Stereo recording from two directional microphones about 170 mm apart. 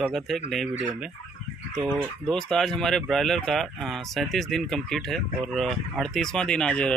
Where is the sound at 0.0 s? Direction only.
Centre (ahead or behind).